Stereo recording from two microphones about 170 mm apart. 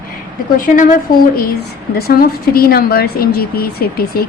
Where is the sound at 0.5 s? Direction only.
55° left (ahead or behind).